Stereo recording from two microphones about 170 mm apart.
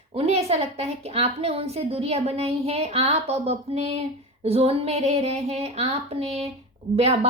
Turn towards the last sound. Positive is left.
turn(degrees=-40)  # may be behind; listen again after turning